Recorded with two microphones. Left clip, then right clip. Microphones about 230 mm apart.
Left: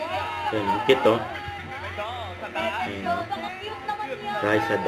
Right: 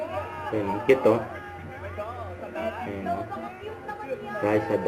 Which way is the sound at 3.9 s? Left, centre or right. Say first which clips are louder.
Left 5 dB; left.